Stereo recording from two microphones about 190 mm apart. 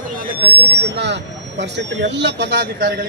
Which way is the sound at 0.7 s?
60° right (ahead or behind).